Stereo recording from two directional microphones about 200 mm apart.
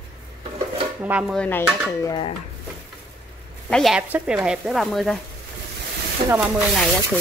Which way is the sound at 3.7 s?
Centre (ahead or behind).